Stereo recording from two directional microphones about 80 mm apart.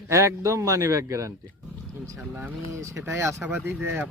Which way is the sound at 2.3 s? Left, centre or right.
Right.